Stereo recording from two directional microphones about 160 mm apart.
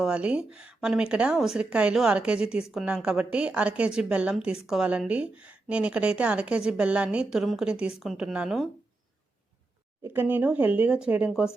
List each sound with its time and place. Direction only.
0.0 s a woman's voice: 5° right (ahead or behind)
10.0 s a woman's voice: 10° right (ahead or behind)